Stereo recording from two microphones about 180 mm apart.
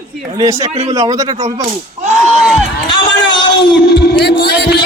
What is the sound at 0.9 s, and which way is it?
Speech, 20° right (ahead or behind).